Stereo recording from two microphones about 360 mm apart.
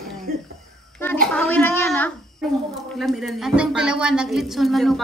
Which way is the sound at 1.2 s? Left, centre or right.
Centre.